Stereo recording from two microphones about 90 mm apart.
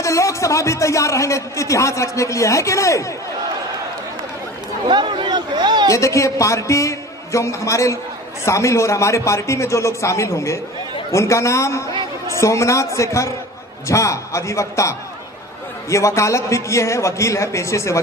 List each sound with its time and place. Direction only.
0.0 s a man's voice: 35° left (ahead or behind)
4.9 s speech: 60° right (ahead or behind)
5.9 s a man's voice: 35° left (ahead or behind)